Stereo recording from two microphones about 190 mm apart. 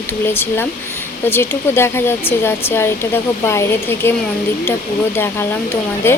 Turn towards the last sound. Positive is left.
turn(degrees=10)  # may be behind; listen again after turning